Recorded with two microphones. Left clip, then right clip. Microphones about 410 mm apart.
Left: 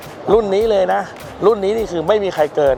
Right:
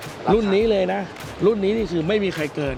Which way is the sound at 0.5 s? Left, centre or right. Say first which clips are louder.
Left 5 dB; left.